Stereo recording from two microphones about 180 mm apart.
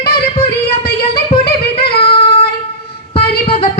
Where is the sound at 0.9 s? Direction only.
60° left (ahead or behind).